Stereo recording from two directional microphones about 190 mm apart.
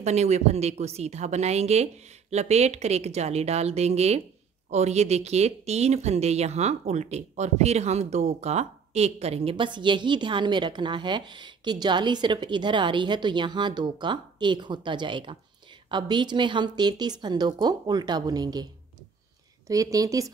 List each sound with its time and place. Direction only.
0.0 s a woman's voice: 35° right (ahead or behind)
19.7 s a woman's voice: 20° right (ahead or behind)